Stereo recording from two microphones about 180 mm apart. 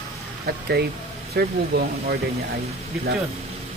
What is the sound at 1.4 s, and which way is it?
Speech, 65° right (ahead or behind).